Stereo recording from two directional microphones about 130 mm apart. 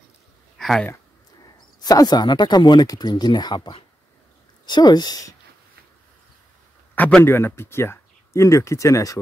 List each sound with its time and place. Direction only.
0.6 s a sound: centre (ahead or behind)
1.8 s speech: 30° left (ahead or behind)
7.0 s speech: 10° left (ahead or behind); by 9.2 s 25° left (ahead or behind)